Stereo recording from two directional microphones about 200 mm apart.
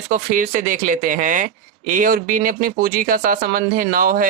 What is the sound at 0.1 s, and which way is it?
Speech, 40° right (ahead or behind).